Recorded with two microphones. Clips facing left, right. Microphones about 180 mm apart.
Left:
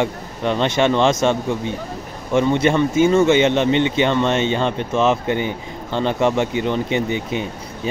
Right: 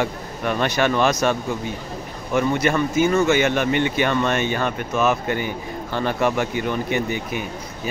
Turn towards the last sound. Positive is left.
turn(degrees=25)  # may be behind; listen again after turning